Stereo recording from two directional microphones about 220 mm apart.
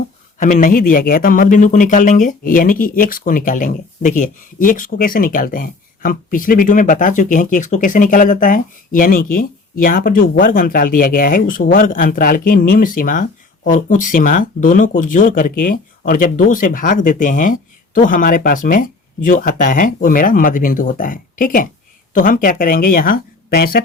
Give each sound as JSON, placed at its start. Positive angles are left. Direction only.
{"t": 0.3, "sound": "speech", "side_deg": 35}